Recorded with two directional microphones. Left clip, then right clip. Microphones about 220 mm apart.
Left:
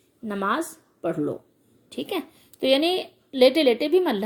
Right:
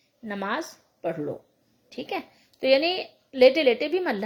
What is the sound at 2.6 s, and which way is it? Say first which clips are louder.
Speech: even; 75° left (ahead or behind).